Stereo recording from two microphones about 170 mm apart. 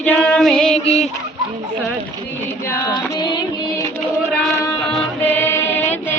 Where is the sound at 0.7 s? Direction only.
40° left (ahead or behind).